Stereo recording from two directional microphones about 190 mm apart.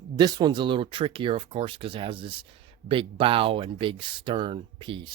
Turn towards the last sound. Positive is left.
turn(degrees=-25)  # may be behind; listen again after turning